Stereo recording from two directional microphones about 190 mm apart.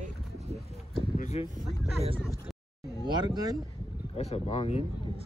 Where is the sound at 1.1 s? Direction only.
40° left (ahead or behind).